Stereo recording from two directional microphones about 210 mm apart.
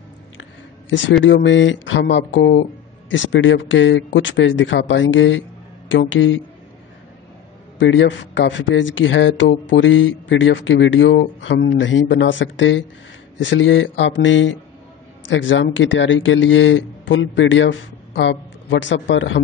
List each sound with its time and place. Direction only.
0.8 s speech: 60° left (ahead or behind)
7.8 s speech: 65° left (ahead or behind)